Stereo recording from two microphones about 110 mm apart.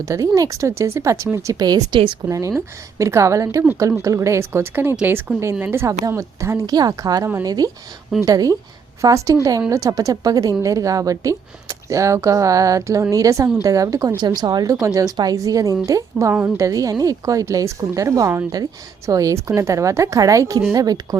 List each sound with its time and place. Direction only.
0.0 s a woman's voice: 30° right (ahead or behind)
1.5 s a woman's voice: 40° right (ahead or behind)
3.0 s a woman's voice: 25° right (ahead or behind)